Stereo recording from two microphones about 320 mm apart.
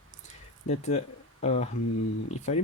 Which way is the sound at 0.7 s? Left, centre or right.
Left.